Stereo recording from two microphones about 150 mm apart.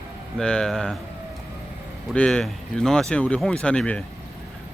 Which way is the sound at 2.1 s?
5° left (ahead or behind).